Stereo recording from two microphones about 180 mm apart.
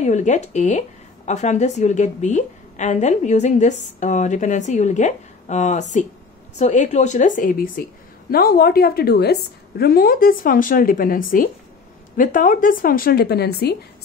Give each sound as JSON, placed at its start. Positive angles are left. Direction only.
{"t": 0.0, "sound": "a woman's voice", "side_deg": 40}